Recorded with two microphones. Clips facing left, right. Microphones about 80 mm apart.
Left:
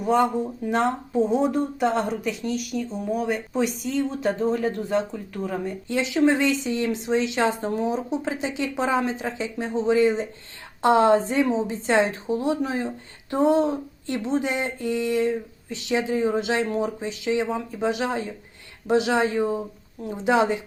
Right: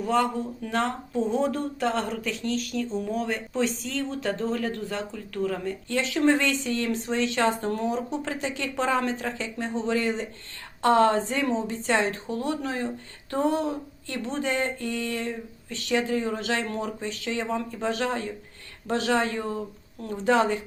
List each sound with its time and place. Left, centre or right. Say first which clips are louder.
0.0 s speech: left 4 dB; centre